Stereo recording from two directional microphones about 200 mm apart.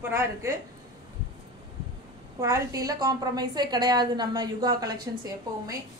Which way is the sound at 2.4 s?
15° right (ahead or behind).